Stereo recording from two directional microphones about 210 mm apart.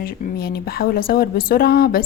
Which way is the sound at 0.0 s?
45° left (ahead or behind).